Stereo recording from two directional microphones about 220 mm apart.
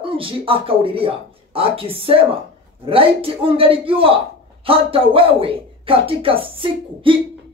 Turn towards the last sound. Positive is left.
turn(degrees=-25)  # may be behind; listen again after turning